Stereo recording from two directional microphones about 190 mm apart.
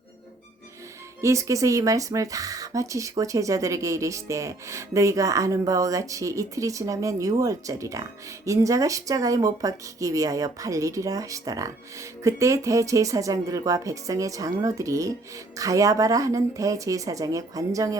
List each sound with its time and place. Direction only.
1.2 s speech: 15° right (ahead or behind)